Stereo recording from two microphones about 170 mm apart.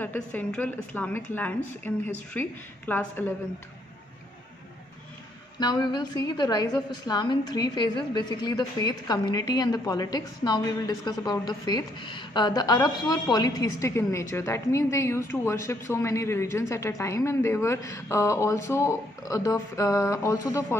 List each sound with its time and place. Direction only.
0.0 s a woman's voice: 10° left (ahead or behind)
5.6 s a woman's voice: 25° left (ahead or behind)